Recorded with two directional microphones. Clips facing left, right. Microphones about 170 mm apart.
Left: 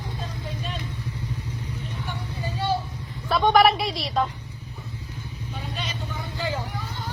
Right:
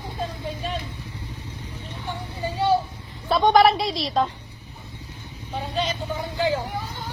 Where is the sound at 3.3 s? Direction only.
30° right (ahead or behind).